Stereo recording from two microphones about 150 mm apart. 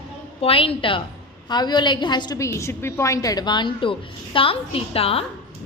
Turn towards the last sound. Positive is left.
turn(degrees=40)  # may be behind; listen again after turning